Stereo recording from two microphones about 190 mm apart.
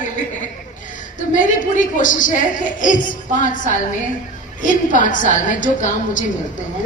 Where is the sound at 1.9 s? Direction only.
45° left (ahead or behind).